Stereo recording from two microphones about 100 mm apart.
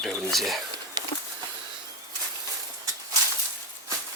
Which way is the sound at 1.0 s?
45° right (ahead or behind).